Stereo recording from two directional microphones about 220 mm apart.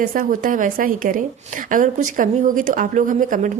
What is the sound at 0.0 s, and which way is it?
A woman's voice, 40° right (ahead or behind).